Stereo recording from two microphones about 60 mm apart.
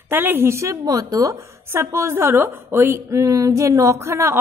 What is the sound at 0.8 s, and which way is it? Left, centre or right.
Speech, right.